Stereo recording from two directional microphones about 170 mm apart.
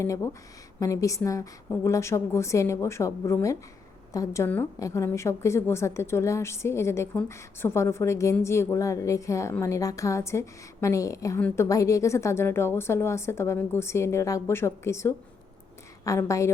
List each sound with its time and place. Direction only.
0.0 s a woman's voice: 15° left (ahead or behind)